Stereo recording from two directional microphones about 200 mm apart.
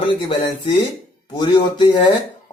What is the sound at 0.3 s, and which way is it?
Speech, 25° left (ahead or behind).